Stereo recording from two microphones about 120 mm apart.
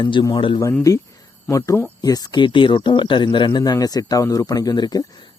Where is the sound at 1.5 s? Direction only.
25° left (ahead or behind).